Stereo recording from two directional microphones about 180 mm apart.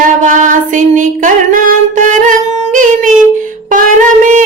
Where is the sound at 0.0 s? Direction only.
45° right (ahead or behind).